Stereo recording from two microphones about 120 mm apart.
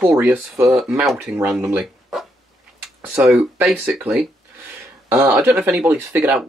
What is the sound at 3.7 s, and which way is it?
Speech, 5° right (ahead or behind).